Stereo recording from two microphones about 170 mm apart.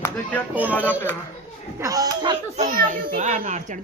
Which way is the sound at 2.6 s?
50° right (ahead or behind).